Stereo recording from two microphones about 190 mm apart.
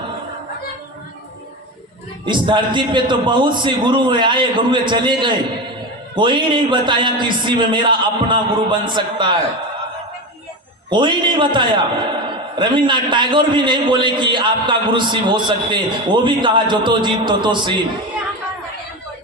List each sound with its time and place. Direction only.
2.2 s a man's voice: 25° right (ahead or behind)
10.8 s a man's voice: 25° right (ahead or behind)